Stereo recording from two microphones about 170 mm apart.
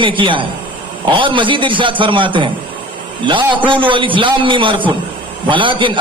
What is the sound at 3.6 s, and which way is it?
A man's voice, 30° right (ahead or behind).